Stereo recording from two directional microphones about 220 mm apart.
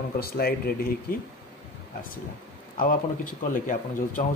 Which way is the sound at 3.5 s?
35° left (ahead or behind).